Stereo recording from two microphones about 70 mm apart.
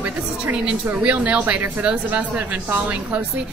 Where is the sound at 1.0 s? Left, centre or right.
Centre.